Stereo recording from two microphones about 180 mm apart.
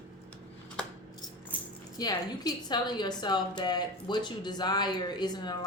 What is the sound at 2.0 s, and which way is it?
A woman's voice, 20° left (ahead or behind).